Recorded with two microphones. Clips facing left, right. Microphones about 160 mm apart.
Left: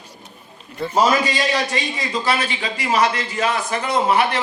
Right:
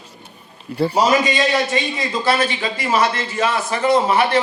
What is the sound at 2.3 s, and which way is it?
A man's voice, 40° right (ahead or behind).